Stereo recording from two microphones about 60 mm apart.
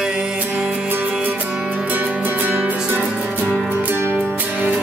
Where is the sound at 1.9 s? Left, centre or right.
Right.